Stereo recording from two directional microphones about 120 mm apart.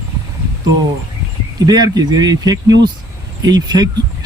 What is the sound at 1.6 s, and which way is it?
Speech, 30° right (ahead or behind).